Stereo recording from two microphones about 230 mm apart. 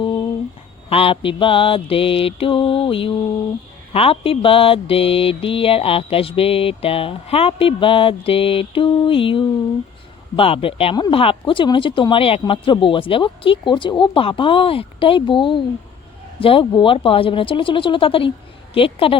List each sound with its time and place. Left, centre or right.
0.9 s mantra: left